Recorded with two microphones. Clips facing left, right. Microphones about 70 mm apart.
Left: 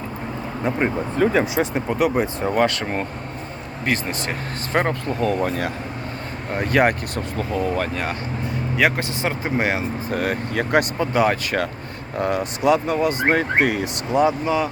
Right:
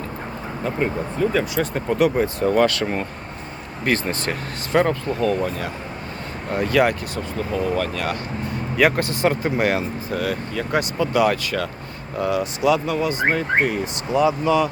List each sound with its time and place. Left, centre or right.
1.3 s speech: left
1.7 s speech: centre
2.2 s speech: left
3.8 s speech: centre
4.7 s speech: left
6.6 s speech: left
8.8 s speech: centre
10.1 s speech: left
10.9 s speech: left
14.2 s speech: left